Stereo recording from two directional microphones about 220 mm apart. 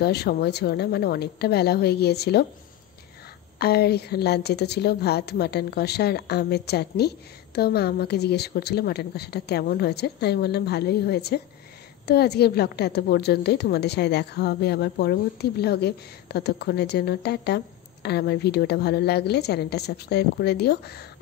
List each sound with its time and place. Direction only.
0.0 s a woman's voice: 45° left (ahead or behind)
3.5 s a woman's voice: 45° left (ahead or behind)